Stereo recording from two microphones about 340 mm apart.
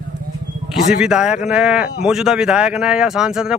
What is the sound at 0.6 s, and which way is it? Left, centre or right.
Speech, centre.